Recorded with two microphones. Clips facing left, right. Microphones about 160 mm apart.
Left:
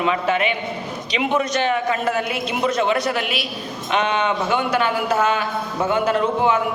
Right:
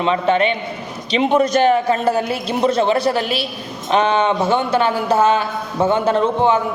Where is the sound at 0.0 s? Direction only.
30° right (ahead or behind).